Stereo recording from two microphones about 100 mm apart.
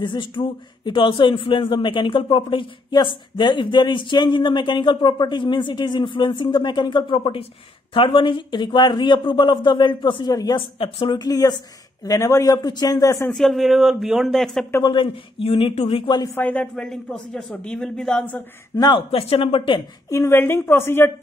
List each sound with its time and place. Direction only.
0.0 s speech: 55° left (ahead or behind)
10.3 s speech: 40° left (ahead or behind)
10.6 s speech: 65° left (ahead or behind)
11.1 s speech: 40° left (ahead or behind)
13.3 s a man's voice: centre (ahead or behind)
14.8 s speech: 50° left (ahead or behind)
15.4 s speech: 80° left
16.3 s speech: 15° left (ahead or behind)
16.7 s a man's voice: 5° left (ahead or behind)
18.9 s speech: 70° left (ahead or behind)
20.1 s a woman's voice: 30° left (ahead or behind)